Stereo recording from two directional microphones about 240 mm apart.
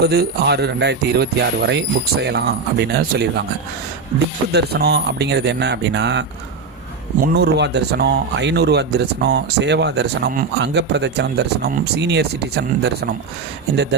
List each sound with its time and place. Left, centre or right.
0.0 s speech: right
4.5 s speech: right
7.3 s speech: right